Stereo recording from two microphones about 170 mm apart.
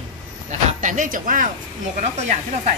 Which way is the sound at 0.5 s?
45° right (ahead or behind).